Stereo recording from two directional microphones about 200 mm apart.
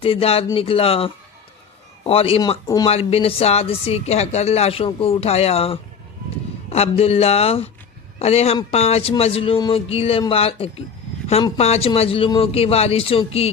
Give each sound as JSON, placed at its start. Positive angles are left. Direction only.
{"t": 0.0, "sound": "a man's voice", "side_deg": 30}